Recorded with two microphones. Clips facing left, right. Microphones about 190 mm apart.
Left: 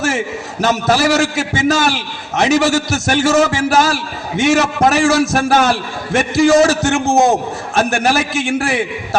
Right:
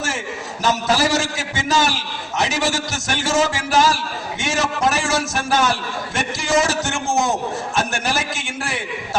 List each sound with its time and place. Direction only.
0.6 s a man's voice: 65° left (ahead or behind)